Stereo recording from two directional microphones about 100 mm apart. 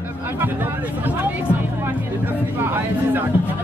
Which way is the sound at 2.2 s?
20° right (ahead or behind).